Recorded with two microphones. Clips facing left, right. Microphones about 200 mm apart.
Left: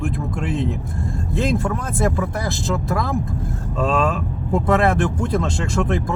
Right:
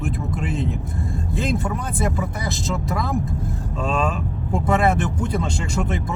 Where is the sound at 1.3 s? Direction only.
Centre (ahead or behind).